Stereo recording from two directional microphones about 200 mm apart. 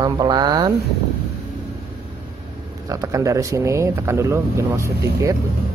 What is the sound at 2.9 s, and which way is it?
Speech, 15° right (ahead or behind).